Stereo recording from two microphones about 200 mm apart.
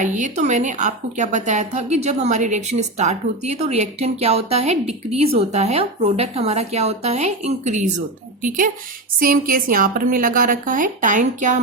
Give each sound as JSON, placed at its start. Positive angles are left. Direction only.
{"t": 0.0, "sound": "a woman's voice", "side_deg": -40}